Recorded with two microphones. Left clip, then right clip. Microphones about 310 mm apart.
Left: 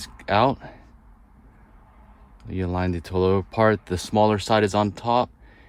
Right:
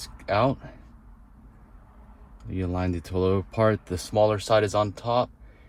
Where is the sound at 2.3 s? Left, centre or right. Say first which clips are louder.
Left 3 dB; left.